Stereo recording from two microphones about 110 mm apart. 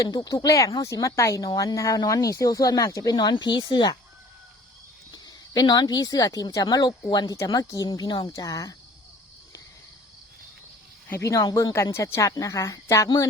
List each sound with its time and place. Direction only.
0.0 s speech: 40° left (ahead or behind)
5.1 s speech: 35° left (ahead or behind)
11.1 s speech: 30° left (ahead or behind)